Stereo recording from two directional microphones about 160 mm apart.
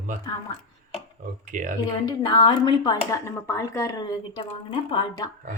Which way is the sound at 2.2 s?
25° left (ahead or behind).